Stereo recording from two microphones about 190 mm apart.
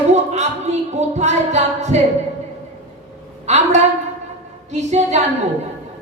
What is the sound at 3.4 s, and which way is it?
Speech, 35° right (ahead or behind).